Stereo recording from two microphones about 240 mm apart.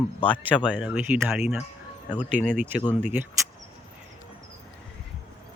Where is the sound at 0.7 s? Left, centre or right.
Centre.